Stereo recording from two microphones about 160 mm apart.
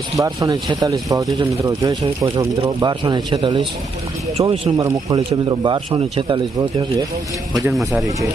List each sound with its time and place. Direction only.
0.2 s speech: 20° right (ahead or behind); by 4.7 s 40° right (ahead or behind)
4.8 s speech: 20° right (ahead or behind)
7.7 s speech: centre (ahead or behind)